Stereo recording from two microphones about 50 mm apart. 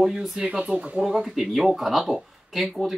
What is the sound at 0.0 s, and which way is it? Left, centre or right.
Speech, centre.